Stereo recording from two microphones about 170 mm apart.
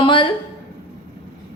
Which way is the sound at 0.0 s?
30° left (ahead or behind).